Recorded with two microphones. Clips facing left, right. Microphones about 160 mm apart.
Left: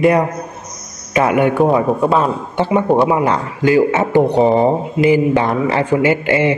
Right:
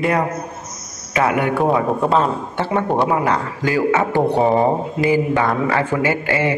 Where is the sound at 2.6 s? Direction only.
15° left (ahead or behind).